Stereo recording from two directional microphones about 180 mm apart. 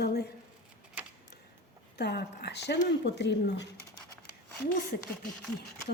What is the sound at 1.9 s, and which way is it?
Speech, 65° left (ahead or behind).